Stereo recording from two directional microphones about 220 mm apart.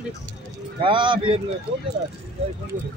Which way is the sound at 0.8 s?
20° right (ahead or behind).